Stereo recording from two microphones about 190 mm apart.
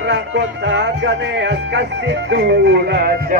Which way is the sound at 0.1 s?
70° right (ahead or behind).